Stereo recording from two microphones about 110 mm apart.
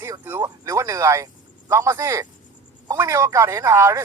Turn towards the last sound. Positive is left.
turn(degrees=-25)  # may be behind; listen again after turning